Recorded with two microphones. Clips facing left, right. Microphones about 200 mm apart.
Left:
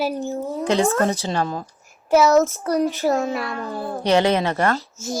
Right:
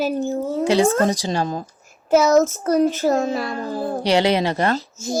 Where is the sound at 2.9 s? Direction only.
40° right (ahead or behind).